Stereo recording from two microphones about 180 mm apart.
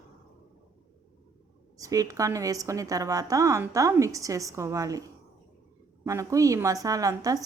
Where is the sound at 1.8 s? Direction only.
20° right (ahead or behind).